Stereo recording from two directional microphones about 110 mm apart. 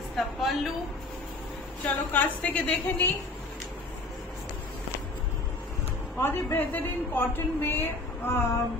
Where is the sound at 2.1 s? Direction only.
10° left (ahead or behind).